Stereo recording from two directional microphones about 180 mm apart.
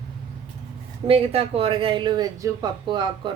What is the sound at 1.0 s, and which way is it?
Speech, 30° right (ahead or behind).